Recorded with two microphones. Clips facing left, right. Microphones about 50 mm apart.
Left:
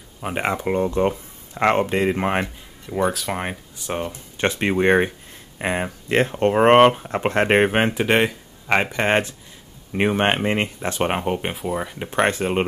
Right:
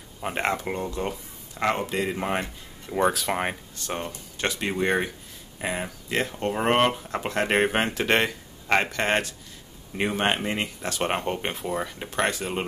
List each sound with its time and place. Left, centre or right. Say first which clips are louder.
0.2 s speech: left 3 dB; centre
0.7 s speech: left 9 dB; left
2.9 s speech: left 1 dB; centre
3.7 s speech: left 5 dB; centre
4.4 s speech: left 6 dB; left
8.0 s speech: left 4 dB; centre; by 11.0 s left
11.0 s speech: left 4 dB; centre
12.2 s speech: left 6 dB; left